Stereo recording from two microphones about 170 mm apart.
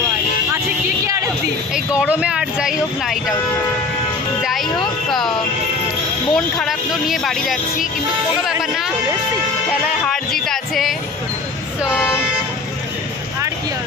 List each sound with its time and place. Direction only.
1.0 s a sound: 20° right (ahead or behind)
2.0 s speech: 5° right (ahead or behind)
4.4 s music: centre (ahead or behind)
6.3 s speech: centre (ahead or behind)
10.3 s music: centre (ahead or behind)